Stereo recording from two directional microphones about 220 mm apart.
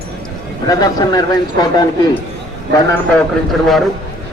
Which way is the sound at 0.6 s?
15° left (ahead or behind).